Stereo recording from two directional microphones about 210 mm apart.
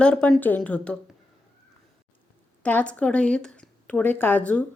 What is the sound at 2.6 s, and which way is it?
Dishes, 5° left (ahead or behind).